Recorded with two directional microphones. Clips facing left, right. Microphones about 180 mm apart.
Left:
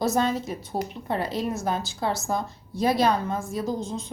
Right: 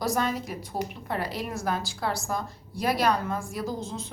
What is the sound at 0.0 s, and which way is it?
A woman's voice, 25° left (ahead or behind).